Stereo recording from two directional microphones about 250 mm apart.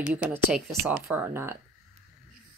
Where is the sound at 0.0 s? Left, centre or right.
Centre.